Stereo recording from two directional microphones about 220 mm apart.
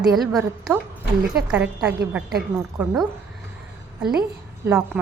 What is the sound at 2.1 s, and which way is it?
Speech, 5° right (ahead or behind).